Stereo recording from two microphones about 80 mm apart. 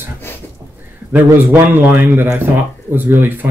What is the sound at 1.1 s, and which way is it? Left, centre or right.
A man's voice, right.